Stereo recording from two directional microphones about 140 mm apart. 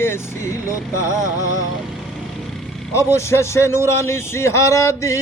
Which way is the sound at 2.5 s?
Centre (ahead or behind).